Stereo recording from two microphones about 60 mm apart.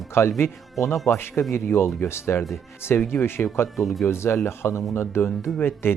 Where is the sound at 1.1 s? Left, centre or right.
Left.